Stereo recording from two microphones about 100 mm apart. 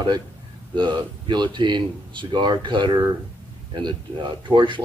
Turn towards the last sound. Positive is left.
turn(degrees=-50)  # may be behind; listen again after turning